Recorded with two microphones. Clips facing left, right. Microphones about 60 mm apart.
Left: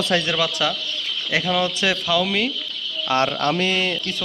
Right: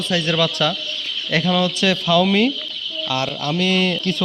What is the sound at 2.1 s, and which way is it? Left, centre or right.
Speech, centre.